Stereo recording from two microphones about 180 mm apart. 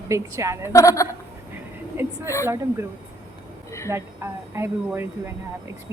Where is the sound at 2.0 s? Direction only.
10° right (ahead or behind).